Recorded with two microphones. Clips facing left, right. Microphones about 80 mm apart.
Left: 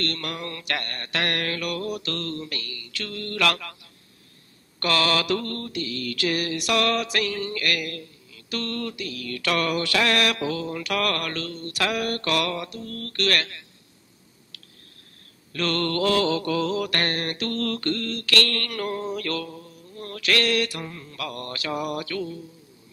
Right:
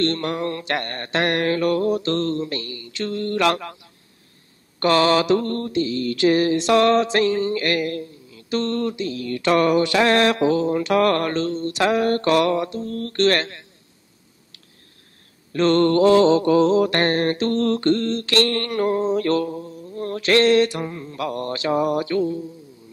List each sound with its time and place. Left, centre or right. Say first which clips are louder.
0.0 s mantra: right 8 dB; right
4.7 s mantra: right 7 dB; right
15.5 s mantra: right 9 dB; right